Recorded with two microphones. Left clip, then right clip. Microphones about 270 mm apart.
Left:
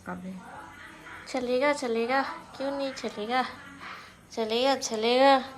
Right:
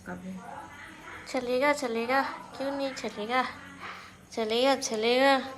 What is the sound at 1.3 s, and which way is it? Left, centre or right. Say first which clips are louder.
A woman's voice: even; centre.